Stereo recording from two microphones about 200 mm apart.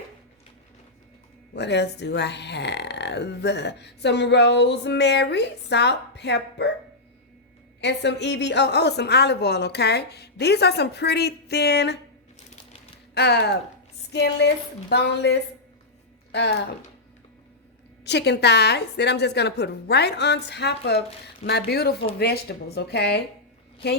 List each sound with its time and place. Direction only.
1.5 s speech: 60° left (ahead or behind)
7.8 s speech: 60° left (ahead or behind)
13.1 s speech: 55° left (ahead or behind)
18.0 s speech: 55° left (ahead or behind)